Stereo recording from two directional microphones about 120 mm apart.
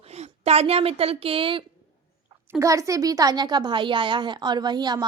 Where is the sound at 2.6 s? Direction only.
25° right (ahead or behind).